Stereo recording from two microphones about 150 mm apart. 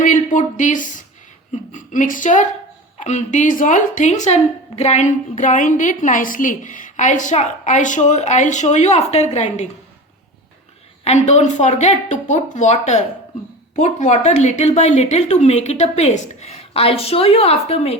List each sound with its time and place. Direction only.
0.0 s a sound: 60° left (ahead or behind)
1.7 s speech: 60° left (ahead or behind)
11.0 s speech: 50° left (ahead or behind)